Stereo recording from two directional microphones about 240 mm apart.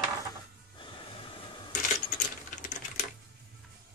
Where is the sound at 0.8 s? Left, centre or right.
Left.